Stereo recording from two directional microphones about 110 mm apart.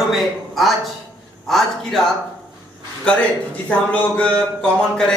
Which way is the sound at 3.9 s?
10° left (ahead or behind).